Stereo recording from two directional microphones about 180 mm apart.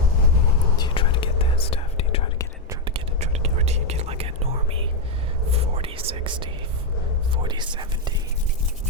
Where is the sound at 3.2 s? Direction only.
35° right (ahead or behind).